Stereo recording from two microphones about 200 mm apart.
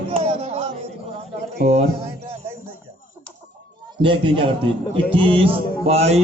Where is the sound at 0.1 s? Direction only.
30° right (ahead or behind).